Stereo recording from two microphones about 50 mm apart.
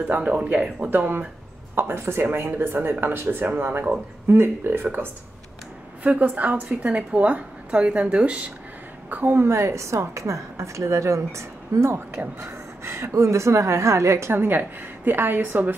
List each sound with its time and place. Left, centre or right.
0.2 s speech: right
0.8 s a woman's voice: right
1.8 s speech: right
2.5 s speech: right
4.3 s speech: right
6.0 s a woman's voice: right
9.1 s a woman's voice: right
9.5 s a woman's voice: right
14.3 s speech: right